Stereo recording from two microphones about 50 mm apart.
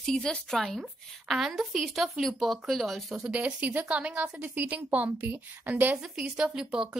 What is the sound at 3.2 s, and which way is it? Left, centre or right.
A woman's voice, right.